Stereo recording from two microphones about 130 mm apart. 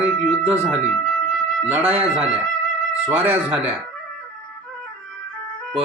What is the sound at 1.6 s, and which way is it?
Speech, 15° right (ahead or behind).